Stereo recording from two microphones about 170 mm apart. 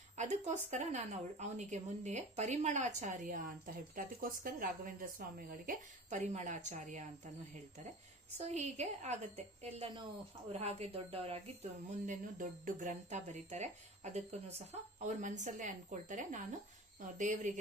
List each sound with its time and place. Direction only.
0.2 s speech: 45° right (ahead or behind)
8.4 s a woman's voice: 40° right (ahead or behind)